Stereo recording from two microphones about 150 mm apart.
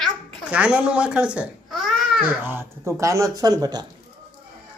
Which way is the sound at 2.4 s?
15° right (ahead or behind).